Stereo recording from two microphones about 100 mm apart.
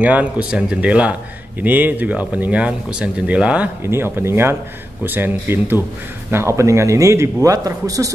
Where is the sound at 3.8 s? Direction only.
25° right (ahead or behind).